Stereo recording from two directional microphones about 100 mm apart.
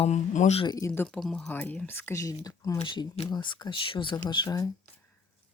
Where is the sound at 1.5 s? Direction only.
20° left (ahead or behind); by 2.8 s 35° left (ahead or behind).